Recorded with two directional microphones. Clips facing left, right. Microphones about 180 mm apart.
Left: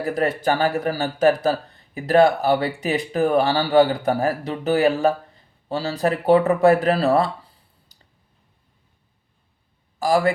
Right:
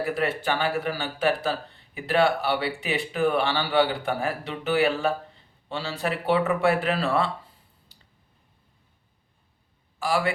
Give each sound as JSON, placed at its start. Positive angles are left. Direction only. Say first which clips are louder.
{"t": 0.0, "sound": "speech", "louder": "left 5 dB", "side_deg": 40}
{"t": 7.9, "sound": "clicking", "louder": "left 1 dB", "side_deg": 40}
{"t": 10.0, "sound": "speech", "louder": "left 6 dB", "side_deg": 40}